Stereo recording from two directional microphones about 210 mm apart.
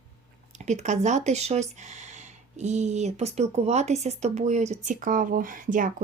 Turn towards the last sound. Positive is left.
turn(degrees=-40)  # may be behind; listen again after turning